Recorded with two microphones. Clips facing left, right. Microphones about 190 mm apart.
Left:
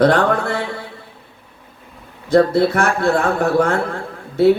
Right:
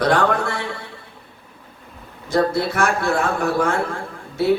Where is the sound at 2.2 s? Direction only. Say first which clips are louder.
Left 6 dB; 60° left (ahead or behind).